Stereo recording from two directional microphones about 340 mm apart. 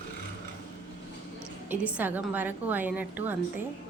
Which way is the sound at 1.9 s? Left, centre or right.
Centre.